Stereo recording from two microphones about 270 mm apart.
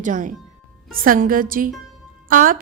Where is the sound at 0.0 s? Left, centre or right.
Right.